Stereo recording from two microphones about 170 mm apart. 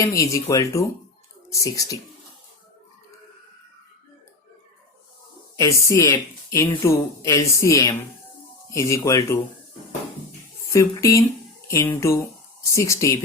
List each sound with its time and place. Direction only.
0.0 s speech: 20° left (ahead or behind)
5.5 s speech: 15° left (ahead or behind)
10.7 s speech: 20° left (ahead or behind)